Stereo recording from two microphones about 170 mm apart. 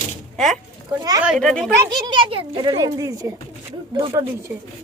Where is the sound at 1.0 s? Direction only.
20° right (ahead or behind).